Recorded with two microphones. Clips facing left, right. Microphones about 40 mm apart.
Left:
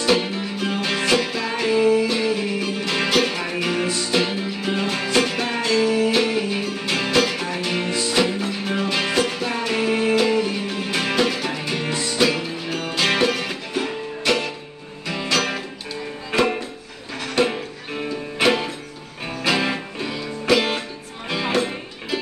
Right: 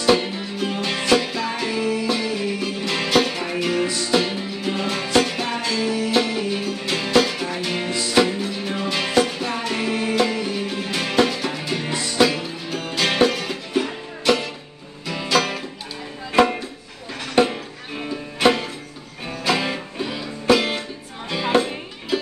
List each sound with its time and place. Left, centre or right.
0.0 s music: centre
17.5 s music: centre
21.5 s music: right